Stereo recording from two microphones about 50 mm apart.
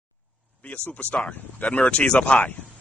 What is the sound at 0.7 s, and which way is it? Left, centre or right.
Speech, left.